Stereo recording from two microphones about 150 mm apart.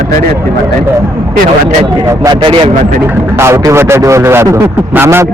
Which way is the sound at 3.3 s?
20° right (ahead or behind).